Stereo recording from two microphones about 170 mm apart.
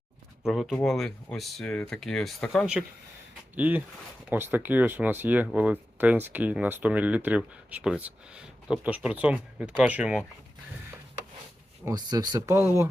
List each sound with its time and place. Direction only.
0.4 s speech: centre (ahead or behind)
11.9 s speech: 20° right (ahead or behind)